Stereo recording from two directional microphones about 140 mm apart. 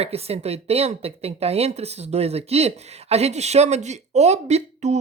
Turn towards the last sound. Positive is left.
turn(degrees=-50)  # may be behind; listen again after turning